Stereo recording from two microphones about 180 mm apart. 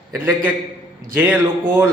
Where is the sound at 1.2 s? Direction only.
10° right (ahead or behind).